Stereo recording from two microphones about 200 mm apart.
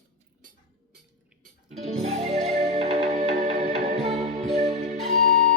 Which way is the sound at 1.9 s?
35° right (ahead or behind).